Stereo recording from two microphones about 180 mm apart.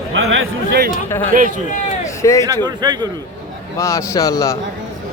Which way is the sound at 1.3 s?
50° right (ahead or behind).